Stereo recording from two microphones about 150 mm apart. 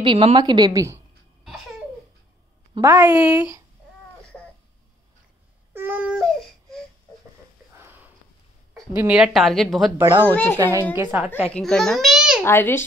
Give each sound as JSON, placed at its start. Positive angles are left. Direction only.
{"t": 0.0, "sound": "a woman's voice", "side_deg": -35}
{"t": 2.8, "sound": "a woman's voice", "side_deg": -15}
{"t": 5.7, "sound": "baby cry", "side_deg": -15}
{"t": 7.7, "sound": "sniff", "side_deg": -15}
{"t": 8.9, "sound": "speech", "side_deg": -10}
{"t": 9.9, "sound": "a woman's voice", "side_deg": -25}
{"t": 10.2, "sound": "a child's voice", "side_deg": 15}
{"t": 11.0, "sound": "a woman's voice", "side_deg": -10}
{"t": 11.5, "sound": "a child's voice", "side_deg": 5}
{"t": 12.4, "sound": "a child's voice", "side_deg": 15}